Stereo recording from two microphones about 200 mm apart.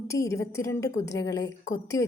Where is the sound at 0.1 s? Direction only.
15° left (ahead or behind).